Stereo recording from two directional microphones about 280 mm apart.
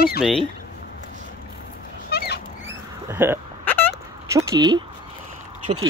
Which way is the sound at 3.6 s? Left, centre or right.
Centre.